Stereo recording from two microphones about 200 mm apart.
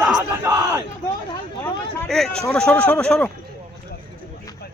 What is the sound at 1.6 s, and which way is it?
Speech, centre (ahead or behind).